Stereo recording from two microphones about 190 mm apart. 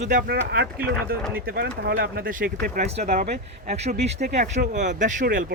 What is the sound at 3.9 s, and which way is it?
Speech, 40° right (ahead or behind).